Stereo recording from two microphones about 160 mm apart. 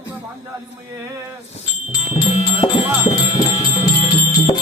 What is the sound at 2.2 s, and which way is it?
Music, 30° left (ahead or behind).